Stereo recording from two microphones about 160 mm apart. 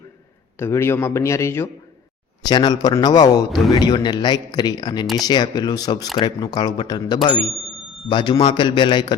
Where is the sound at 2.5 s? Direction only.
25° left (ahead or behind).